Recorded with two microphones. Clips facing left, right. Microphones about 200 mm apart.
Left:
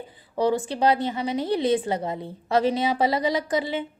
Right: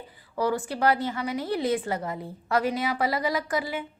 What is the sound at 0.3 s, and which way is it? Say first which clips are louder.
A woman's voice: left 4 dB; 20° left (ahead or behind).